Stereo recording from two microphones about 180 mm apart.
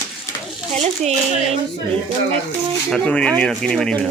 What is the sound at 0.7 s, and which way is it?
Speech, 35° right (ahead or behind).